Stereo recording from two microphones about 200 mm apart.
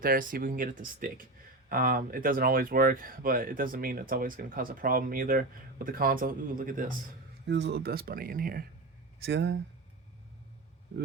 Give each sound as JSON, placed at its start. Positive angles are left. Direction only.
{"t": 0.0, "sound": "speech", "side_deg": -45}
{"t": 7.4, "sound": "speech", "side_deg": -60}
{"t": 9.2, "sound": "speech", "side_deg": -60}